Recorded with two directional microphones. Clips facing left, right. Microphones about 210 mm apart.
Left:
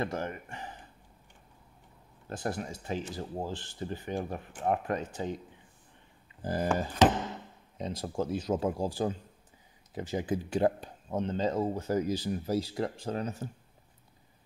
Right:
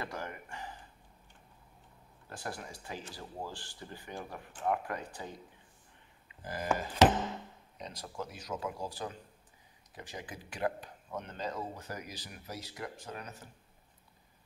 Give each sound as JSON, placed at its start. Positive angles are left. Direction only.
{"t": 0.0, "sound": "speech", "side_deg": 25}
{"t": 2.5, "sound": "speech", "side_deg": 20}
{"t": 6.4, "sound": "speech", "side_deg": 30}